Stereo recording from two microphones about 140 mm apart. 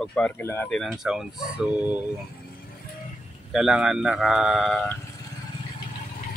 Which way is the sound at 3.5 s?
5° right (ahead or behind).